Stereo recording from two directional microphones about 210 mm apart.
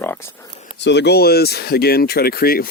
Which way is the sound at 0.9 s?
55° left (ahead or behind).